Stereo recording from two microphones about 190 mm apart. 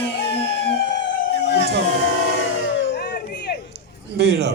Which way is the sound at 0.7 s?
60° left (ahead or behind).